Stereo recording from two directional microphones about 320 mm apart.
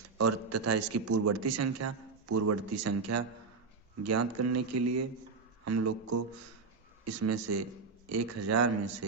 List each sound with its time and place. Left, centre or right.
0.2 s a man's voice: right